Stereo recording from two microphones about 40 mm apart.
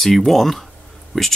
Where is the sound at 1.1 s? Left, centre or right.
Centre.